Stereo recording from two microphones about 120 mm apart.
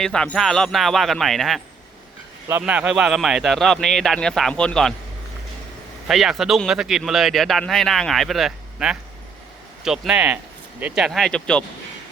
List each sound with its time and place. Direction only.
0.0 s a man's voice: 5° left (ahead or behind)
2.5 s a man's voice: 15° right (ahead or behind); by 4.9 s 5° left (ahead or behind)
6.1 s a man's voice: centre (ahead or behind)
10.9 s a man's voice: centre (ahead or behind)